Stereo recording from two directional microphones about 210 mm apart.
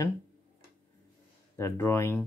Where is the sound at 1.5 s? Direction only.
15° left (ahead or behind).